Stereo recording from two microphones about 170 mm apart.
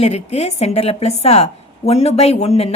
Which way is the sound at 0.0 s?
40° left (ahead or behind).